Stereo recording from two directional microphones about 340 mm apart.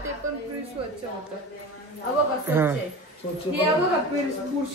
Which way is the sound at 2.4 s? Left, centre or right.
Centre.